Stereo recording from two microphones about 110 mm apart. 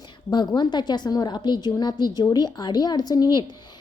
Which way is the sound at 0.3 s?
45° left (ahead or behind).